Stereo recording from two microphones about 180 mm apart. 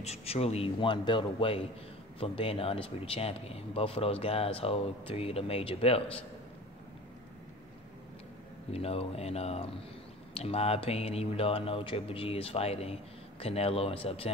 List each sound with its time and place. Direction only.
0.0 s speech: 35° left (ahead or behind)
8.7 s speech: 35° left (ahead or behind)